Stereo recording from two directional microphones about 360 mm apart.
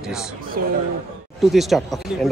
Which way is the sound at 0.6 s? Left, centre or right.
Right.